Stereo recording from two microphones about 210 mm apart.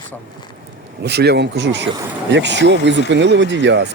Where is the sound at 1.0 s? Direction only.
50° right (ahead or behind).